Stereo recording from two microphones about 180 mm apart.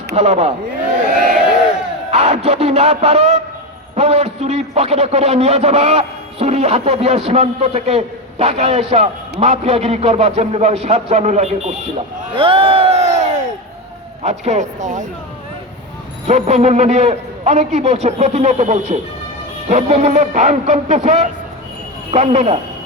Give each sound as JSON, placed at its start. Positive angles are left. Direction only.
{"t": 0.2, "sound": "a man's voice", "side_deg": -40}
{"t": 2.0, "sound": "a man's voice", "side_deg": -35}
{"t": 12.4, "sound": "crowd", "side_deg": -30}
{"t": 14.3, "sound": "a man's voice", "side_deg": -40}
{"t": 16.2, "sound": "a man's voice", "side_deg": -40}